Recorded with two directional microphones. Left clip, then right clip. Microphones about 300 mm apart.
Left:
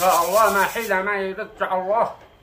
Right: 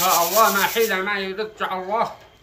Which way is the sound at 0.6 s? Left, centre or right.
Centre.